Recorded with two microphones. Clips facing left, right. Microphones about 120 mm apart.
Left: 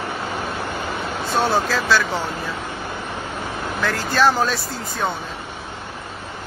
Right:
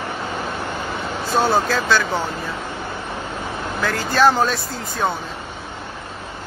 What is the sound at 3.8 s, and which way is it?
Speech, centre (ahead or behind).